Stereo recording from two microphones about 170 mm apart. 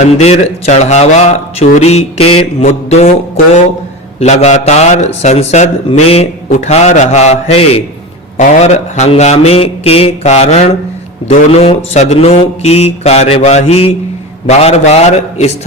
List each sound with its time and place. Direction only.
0.0 s a man's voice: 40° left (ahead or behind)
4.2 s a man's voice: 40° left (ahead or behind)